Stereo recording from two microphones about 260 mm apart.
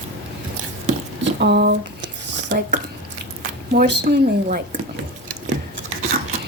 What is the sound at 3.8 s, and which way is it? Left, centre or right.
A woman's voice, right.